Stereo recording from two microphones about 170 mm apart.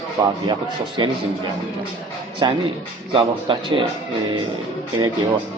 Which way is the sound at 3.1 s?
30° right (ahead or behind).